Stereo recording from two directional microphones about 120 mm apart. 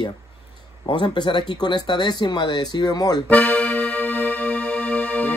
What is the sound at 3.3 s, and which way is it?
Music, 10° left (ahead or behind).